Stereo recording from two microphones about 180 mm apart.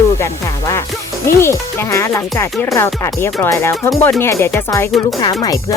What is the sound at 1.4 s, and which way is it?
Speech, 15° left (ahead or behind).